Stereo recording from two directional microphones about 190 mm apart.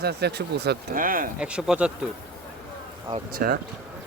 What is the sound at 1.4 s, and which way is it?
Speech, 5° right (ahead or behind).